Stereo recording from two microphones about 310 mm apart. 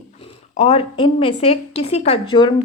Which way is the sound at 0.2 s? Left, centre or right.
Centre.